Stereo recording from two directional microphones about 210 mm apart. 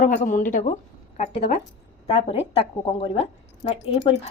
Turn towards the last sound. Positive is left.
turn(degrees=30)  # may be behind; listen again after turning